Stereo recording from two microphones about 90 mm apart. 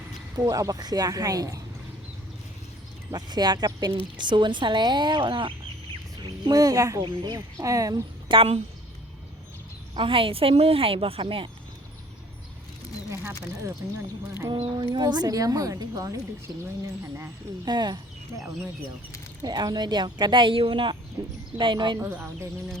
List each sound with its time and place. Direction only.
0.3 s speech: 40° right (ahead or behind)
3.1 s a woman's voice: 50° right (ahead or behind)
6.2 s speech: 50° right (ahead or behind)
7.0 s speech: 50° right (ahead or behind)
7.6 s speech: 40° right (ahead or behind)
8.3 s a woman's voice: 65° right (ahead or behind)
9.9 s a woman's voice: 80° right
13.7 s speech: 30° right (ahead or behind)
14.5 s a woman's voice: 90° right
14.9 s speech: 50° right (ahead or behind)
17.7 s speech: 55° right (ahead or behind)
19.4 s a woman's voice: 50° right (ahead or behind)
21.9 s speech: 30° right (ahead or behind)